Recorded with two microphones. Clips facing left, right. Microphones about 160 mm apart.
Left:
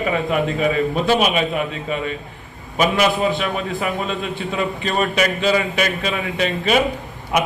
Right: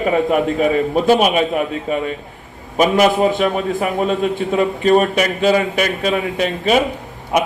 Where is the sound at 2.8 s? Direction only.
45° right (ahead or behind).